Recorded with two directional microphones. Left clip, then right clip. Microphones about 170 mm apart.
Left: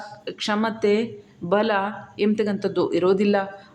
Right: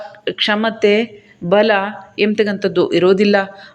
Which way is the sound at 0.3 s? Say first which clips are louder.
Right 8 dB; 15° right (ahead or behind).